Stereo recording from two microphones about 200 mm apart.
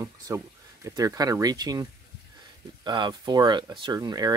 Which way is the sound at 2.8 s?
20° right (ahead or behind).